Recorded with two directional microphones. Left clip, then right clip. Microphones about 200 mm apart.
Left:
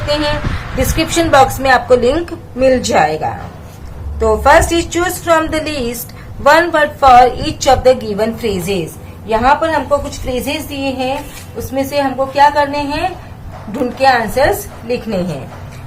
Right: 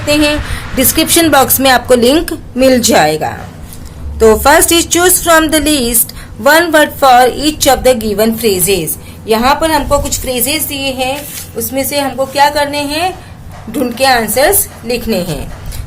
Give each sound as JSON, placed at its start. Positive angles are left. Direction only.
{"t": 0.1, "sound": "a woman's voice", "side_deg": -35}